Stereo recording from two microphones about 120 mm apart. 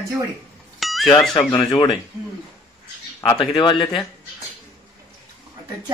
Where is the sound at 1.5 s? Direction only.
35° left (ahead or behind).